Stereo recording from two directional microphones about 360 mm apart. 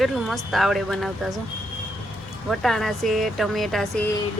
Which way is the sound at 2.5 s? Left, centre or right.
Centre.